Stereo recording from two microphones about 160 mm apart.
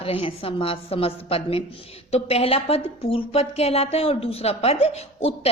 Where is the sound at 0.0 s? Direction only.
35° left (ahead or behind).